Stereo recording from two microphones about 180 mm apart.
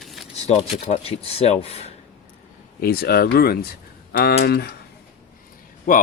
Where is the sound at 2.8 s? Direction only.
55° left (ahead or behind).